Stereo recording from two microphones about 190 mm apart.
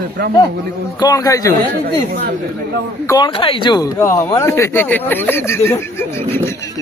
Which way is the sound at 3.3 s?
30° left (ahead or behind).